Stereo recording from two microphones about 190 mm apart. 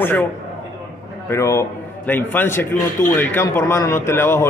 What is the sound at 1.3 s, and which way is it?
A man's voice, 15° left (ahead or behind).